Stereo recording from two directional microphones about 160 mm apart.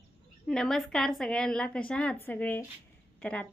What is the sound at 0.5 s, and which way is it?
Speech, 5° left (ahead or behind).